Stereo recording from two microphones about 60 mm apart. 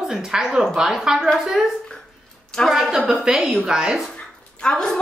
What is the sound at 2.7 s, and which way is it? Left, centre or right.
A woman's voice, centre.